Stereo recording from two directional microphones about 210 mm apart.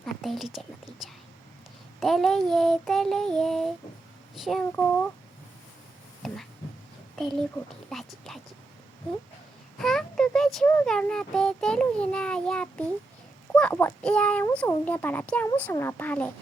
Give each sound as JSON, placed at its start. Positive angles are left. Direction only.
{"t": 0.0, "sound": "a woman's voice", "side_deg": 0}
{"t": 2.0, "sound": "speech", "side_deg": 0}
{"t": 6.2, "sound": "speech", "side_deg": 0}
{"t": 9.7, "sound": "speech", "side_deg": 0}